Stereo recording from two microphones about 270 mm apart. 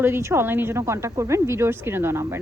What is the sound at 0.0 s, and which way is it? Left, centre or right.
Speech, centre.